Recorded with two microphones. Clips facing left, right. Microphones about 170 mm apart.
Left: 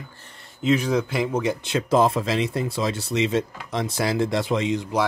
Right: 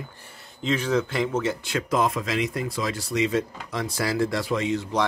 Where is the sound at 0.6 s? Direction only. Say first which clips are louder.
Left 3 dB; 10° left (ahead or behind).